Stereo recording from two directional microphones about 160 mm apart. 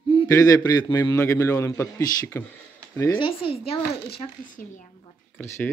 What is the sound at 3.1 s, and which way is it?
Speech, 35° left (ahead or behind).